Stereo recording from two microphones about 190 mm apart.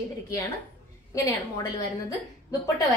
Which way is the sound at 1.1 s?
15° left (ahead or behind).